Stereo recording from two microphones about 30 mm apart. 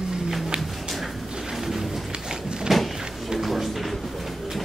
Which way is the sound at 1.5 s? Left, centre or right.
Centre.